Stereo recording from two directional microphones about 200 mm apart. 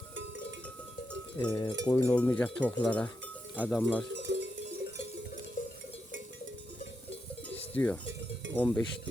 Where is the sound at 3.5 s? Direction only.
10° right (ahead or behind).